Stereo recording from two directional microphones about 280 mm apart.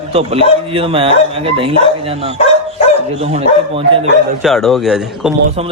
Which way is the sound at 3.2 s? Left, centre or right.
Right.